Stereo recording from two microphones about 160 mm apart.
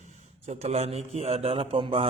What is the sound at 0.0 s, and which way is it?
A man's voice, 45° right (ahead or behind).